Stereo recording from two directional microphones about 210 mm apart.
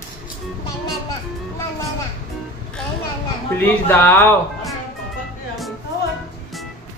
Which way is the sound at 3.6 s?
10° left (ahead or behind).